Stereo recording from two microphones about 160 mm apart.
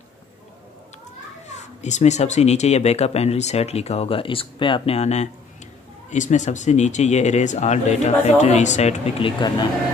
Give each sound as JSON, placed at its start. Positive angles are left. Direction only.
{"t": 1.8, "sound": "speech", "side_deg": 45}